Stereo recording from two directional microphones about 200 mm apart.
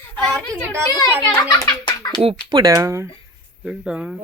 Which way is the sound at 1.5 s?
20° left (ahead or behind).